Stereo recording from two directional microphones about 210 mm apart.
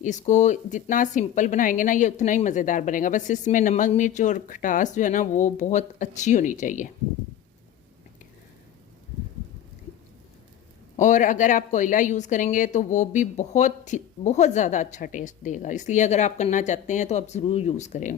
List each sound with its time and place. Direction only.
0.0 s a woman's voice: 35° left (ahead or behind)
10.9 s a woman's voice: 35° left (ahead or behind)